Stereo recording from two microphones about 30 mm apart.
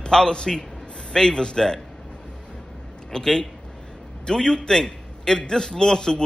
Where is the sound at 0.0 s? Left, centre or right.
Left.